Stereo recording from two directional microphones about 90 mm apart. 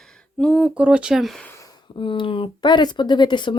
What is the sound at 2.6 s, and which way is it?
Speech, 55° left (ahead or behind).